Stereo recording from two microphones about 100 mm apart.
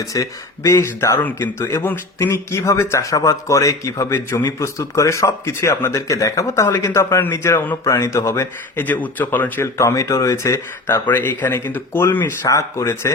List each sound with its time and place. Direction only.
0.0 s a man's voice: 35° left (ahead or behind)
1.2 s a man's voice: 20° left (ahead or behind)
11.0 s a man's voice: 20° left (ahead or behind)